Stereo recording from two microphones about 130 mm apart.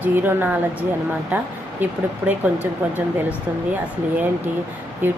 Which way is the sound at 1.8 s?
15° right (ahead or behind).